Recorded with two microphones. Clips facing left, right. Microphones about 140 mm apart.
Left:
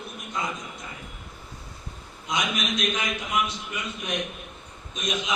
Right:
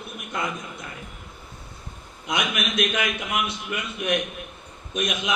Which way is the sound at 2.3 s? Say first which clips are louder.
Right 1 dB; 60° right (ahead or behind).